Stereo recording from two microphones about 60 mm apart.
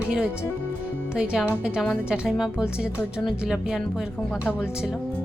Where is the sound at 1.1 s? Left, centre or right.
Centre.